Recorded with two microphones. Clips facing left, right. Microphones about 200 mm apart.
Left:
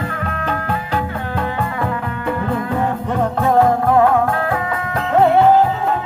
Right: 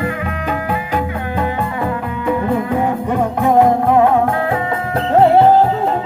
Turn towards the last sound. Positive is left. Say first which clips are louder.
# right 2 dB
turn(degrees=-35)  # may be behind; listen again after turning